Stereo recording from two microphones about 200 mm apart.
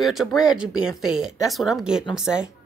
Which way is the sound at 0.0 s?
Centre (ahead or behind).